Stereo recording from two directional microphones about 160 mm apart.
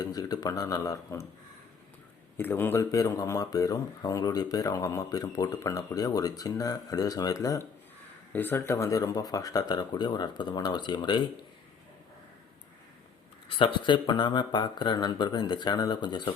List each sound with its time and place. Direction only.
0.0 s speech: 25° left (ahead or behind)
2.4 s speech: 15° left (ahead or behind); by 11.2 s 30° left (ahead or behind)
13.6 s speech: 30° left (ahead or behind)